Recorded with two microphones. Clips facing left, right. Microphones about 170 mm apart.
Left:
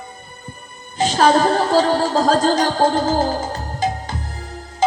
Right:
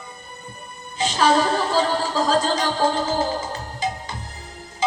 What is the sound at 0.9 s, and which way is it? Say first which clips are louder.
Music: left 4 dB; 50° left (ahead or behind).